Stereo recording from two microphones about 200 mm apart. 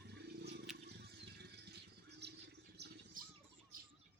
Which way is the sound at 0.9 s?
55° right (ahead or behind).